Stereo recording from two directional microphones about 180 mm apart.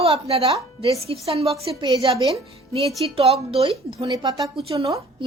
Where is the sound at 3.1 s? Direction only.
35° right (ahead or behind).